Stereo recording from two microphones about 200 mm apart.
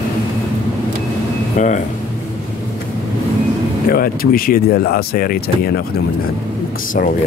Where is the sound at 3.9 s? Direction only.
45° left (ahead or behind).